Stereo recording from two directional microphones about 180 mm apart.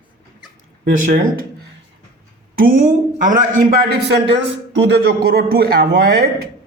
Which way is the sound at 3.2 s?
45° right (ahead or behind).